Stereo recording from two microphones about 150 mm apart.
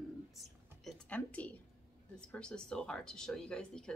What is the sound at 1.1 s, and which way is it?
Speech, 10° left (ahead or behind).